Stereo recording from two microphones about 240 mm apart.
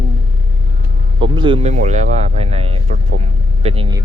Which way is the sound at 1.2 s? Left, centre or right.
Right.